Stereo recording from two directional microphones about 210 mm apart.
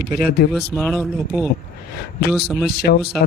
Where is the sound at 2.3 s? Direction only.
Centre (ahead or behind).